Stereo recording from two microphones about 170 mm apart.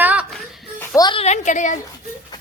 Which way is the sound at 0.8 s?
25° left (ahead or behind).